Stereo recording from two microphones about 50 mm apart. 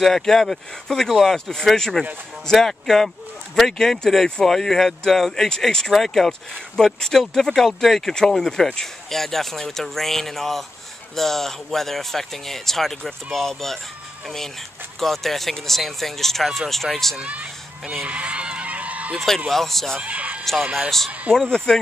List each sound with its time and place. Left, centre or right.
0.0 s speech: centre
17.2 s a sound: right
18.0 s goose: right
19.1 s speech: centre
20.0 s speech: right
21.4 s speech: centre